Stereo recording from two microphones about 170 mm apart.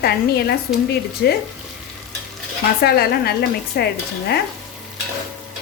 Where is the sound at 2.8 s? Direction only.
65° left (ahead or behind).